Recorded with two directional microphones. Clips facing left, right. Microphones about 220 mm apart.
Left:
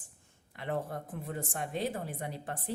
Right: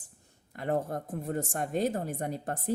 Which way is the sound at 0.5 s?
45° right (ahead or behind).